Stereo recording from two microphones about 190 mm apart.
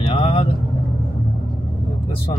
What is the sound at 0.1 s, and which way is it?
Vehicle, 35° left (ahead or behind).